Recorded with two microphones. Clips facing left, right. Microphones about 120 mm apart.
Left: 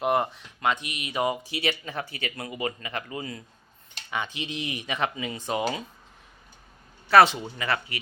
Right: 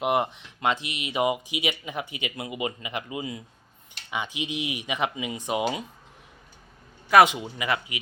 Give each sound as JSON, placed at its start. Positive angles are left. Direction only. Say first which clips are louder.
{"t": 0.0, "sound": "speech", "louder": "even", "side_deg": -15}
{"t": 7.1, "sound": "speech", "louder": "even", "side_deg": -10}